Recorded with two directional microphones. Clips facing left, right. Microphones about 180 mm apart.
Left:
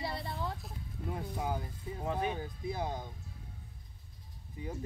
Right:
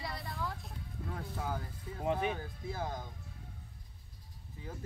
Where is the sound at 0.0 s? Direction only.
30° left (ahead or behind).